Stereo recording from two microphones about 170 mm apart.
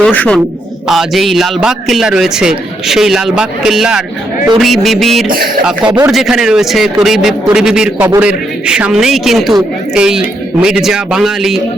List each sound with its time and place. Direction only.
0.0 s a man's voice: 5° left (ahead or behind)